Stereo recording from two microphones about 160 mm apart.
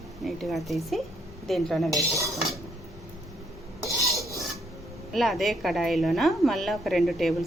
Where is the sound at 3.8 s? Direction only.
20° right (ahead or behind).